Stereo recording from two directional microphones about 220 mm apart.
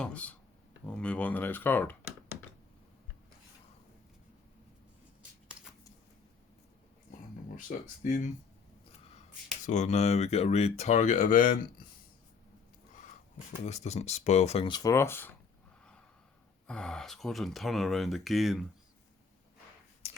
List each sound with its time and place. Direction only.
0.0 s speech: 5° left (ahead or behind)
7.7 s speech: 35° left (ahead or behind)
9.6 s speech: 30° left (ahead or behind)
13.7 s speech: 30° left (ahead or behind); by 15.3 s 10° left (ahead or behind)
16.6 s speech: 5° left (ahead or behind)
20.0 s a sound: 25° left (ahead or behind)